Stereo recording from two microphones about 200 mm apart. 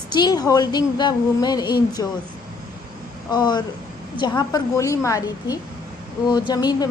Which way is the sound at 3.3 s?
20° left (ahead or behind).